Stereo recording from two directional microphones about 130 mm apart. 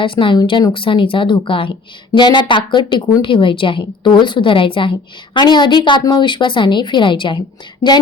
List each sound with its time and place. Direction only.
0.0 s a woman's voice: 40° left (ahead or behind)